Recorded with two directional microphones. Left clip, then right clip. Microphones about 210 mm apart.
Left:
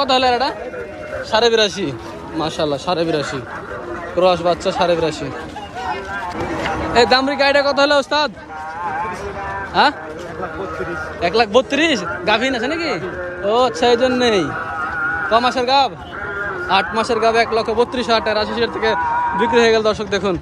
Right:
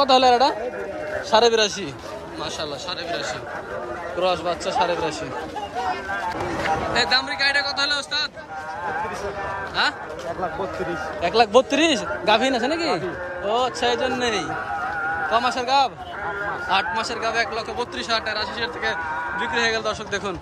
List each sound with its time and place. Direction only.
0.0 s speech: 20° right (ahead or behind)
2.6 s a man's voice: centre (ahead or behind)
6.9 s a man's voice: centre (ahead or behind)
9.8 s a man's voice: 5° right (ahead or behind)
11.1 s speech: 10° right (ahead or behind)
15.3 s speech: 10° right (ahead or behind)